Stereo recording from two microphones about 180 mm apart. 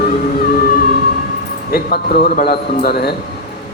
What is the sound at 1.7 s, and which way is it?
A man's voice, 60° left (ahead or behind).